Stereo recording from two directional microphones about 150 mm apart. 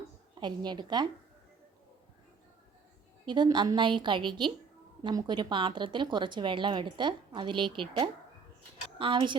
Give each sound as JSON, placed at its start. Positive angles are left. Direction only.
{"t": 0.3, "sound": "a woman's voice", "side_deg": -30}
{"t": 3.2, "sound": "speech", "side_deg": -30}